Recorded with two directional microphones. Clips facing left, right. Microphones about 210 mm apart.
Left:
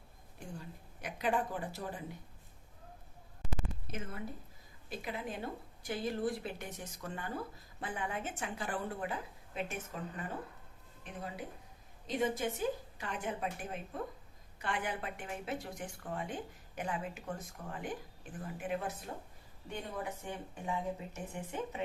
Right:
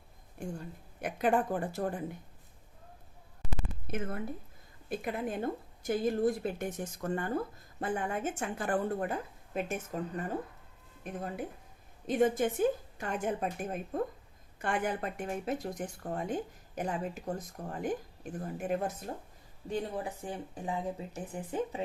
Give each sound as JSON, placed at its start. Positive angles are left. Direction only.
{"t": 0.4, "sound": "a woman's voice", "side_deg": -50}
{"t": 3.9, "sound": "a woman's voice", "side_deg": -55}